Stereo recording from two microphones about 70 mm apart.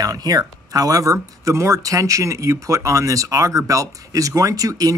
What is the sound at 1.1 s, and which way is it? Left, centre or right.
Speech, right.